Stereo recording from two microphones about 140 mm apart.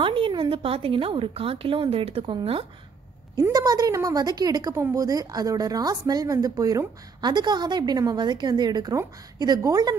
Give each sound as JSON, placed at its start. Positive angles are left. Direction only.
{"t": 0.0, "sound": "a woman's voice", "side_deg": -40}
{"t": 3.5, "sound": "a woman's voice", "side_deg": -25}